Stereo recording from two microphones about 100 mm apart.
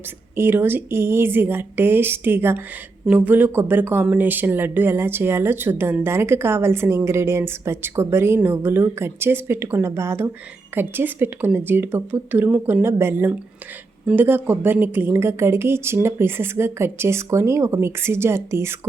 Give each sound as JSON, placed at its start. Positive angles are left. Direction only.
{"t": 0.3, "sound": "speech", "side_deg": -20}